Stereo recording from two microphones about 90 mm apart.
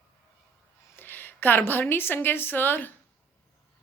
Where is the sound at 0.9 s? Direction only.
20° left (ahead or behind).